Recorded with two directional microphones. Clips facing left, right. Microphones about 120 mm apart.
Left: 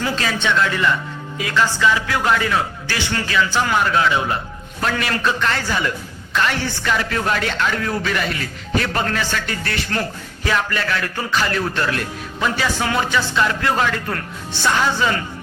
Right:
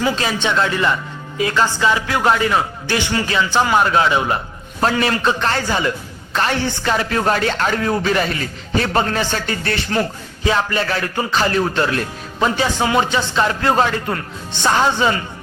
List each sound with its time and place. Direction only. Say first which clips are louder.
0.2 s a man's voice: right 1 dB; 25° right (ahead or behind)